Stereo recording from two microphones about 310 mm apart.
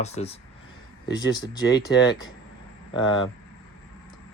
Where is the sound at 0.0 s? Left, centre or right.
Left.